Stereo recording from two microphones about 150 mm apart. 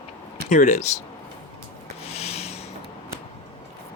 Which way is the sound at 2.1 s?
45° left (ahead or behind).